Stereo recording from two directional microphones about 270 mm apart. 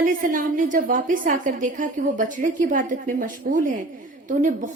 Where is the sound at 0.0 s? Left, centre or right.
Right.